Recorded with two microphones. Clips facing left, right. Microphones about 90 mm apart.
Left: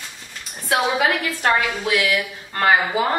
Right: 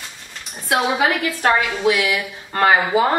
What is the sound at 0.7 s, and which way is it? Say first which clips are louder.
Speech: right 1 dB; 5° right (ahead or behind).